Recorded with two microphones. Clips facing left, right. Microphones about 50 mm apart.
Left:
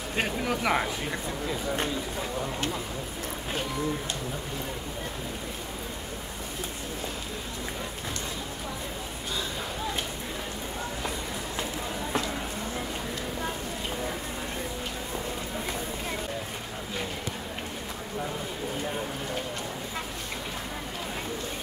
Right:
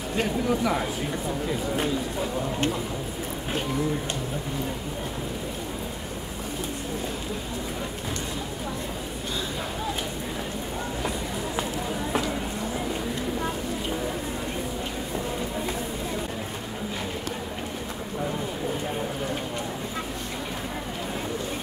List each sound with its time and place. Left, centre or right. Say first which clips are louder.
0.2 s a man's voice: right 3 dB; left